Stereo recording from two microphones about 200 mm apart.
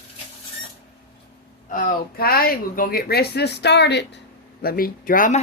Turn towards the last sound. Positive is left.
turn(degrees=40)  # may be behind; listen again after turning